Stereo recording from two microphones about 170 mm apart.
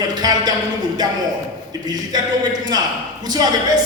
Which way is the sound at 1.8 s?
25° right (ahead or behind).